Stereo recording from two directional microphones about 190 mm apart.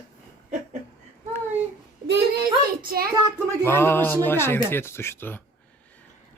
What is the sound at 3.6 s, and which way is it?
Speech, 10° left (ahead or behind).